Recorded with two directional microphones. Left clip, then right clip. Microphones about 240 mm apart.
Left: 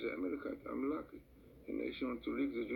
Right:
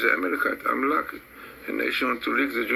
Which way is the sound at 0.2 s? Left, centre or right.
Right.